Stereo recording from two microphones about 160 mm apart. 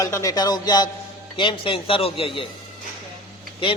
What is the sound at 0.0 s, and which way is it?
A man's voice, 20° left (ahead or behind).